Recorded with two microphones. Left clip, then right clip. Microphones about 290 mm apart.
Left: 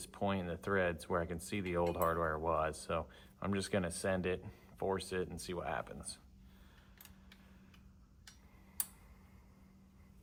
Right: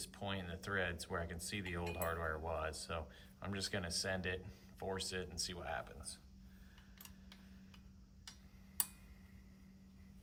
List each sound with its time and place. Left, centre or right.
0.1 s speech: left